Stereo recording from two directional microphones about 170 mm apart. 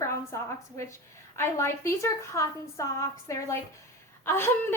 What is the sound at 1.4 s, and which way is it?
A woman's voice, 15° left (ahead or behind).